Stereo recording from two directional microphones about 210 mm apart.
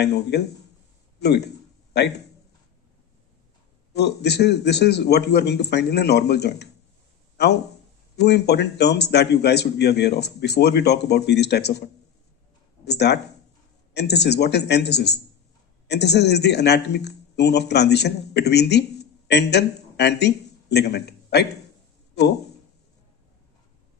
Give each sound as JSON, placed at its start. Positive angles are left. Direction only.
{"t": 0.0, "sound": "a man's voice", "side_deg": 50}
{"t": 3.9, "sound": "a man's voice", "side_deg": 50}